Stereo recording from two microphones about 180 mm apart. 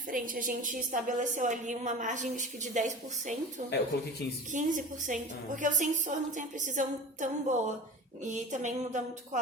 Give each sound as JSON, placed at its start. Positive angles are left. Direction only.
{"t": 0.1, "sound": "a woman's voice", "side_deg": -50}
{"t": 4.5, "sound": "a woman's voice", "side_deg": -45}